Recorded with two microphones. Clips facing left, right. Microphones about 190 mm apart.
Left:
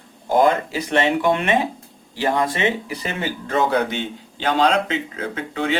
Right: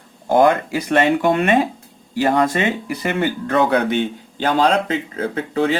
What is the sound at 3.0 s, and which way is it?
Speech, 60° right (ahead or behind).